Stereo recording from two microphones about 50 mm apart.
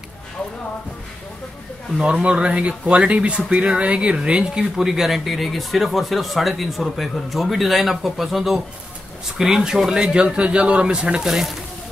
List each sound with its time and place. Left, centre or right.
2.2 s speech: right
4.8 s speech: centre
11.2 s speech: centre